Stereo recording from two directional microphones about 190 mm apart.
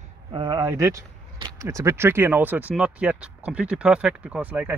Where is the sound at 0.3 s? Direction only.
25° right (ahead or behind).